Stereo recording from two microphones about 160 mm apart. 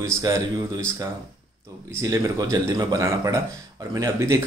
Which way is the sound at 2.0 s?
20° right (ahead or behind).